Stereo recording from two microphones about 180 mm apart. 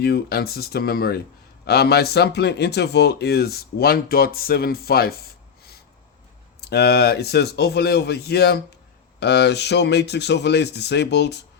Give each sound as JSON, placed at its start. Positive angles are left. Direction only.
{"t": 0.0, "sound": "speech", "side_deg": 60}
{"t": 6.6, "sound": "speech", "side_deg": 65}